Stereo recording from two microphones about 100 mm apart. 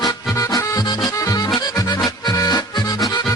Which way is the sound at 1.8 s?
40° left (ahead or behind).